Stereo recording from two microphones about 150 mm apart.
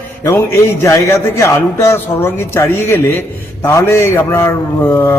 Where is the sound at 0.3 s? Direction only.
20° left (ahead or behind).